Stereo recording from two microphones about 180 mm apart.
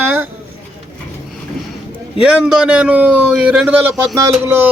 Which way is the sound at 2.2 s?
5° right (ahead or behind).